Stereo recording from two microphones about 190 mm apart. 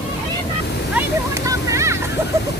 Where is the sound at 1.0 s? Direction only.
15° right (ahead or behind).